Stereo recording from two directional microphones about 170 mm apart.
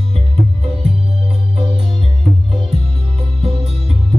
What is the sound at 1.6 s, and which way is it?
Music, 35° right (ahead or behind).